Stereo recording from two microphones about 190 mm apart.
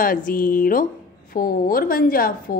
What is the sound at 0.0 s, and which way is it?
A woman's voice, 45° left (ahead or behind).